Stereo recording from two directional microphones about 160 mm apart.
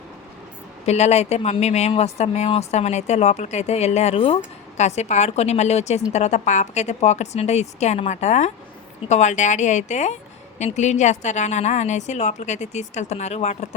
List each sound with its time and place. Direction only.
0.9 s speech: 45° left (ahead or behind)